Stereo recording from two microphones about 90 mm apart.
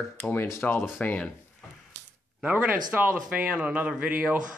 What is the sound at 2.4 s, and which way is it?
Speech, 20° right (ahead or behind).